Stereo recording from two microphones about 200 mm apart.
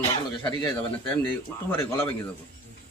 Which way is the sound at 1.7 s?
10° left (ahead or behind).